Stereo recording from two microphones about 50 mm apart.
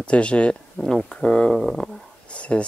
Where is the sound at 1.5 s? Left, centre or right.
Centre.